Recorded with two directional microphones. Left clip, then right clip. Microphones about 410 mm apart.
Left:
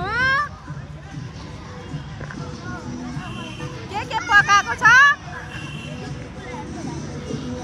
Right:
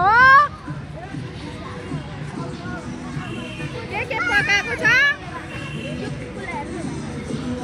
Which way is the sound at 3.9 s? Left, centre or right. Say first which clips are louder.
Left 3 dB; left.